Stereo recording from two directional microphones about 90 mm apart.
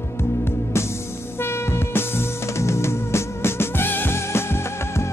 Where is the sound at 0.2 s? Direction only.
30° left (ahead or behind).